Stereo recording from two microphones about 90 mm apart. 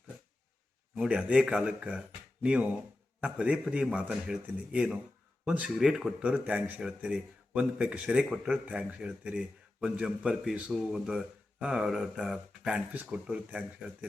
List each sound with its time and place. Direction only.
0.9 s speech: 10° right (ahead or behind)